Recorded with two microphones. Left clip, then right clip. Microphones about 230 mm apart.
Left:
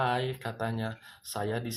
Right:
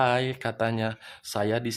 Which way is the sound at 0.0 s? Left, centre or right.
Right.